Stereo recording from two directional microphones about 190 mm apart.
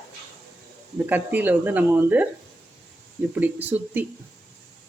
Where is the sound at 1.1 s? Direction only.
10° right (ahead or behind).